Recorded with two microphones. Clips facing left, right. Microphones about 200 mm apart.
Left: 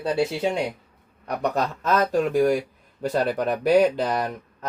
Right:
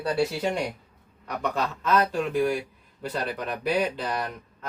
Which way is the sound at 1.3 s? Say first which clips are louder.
Left 4 dB; 40° left (ahead or behind).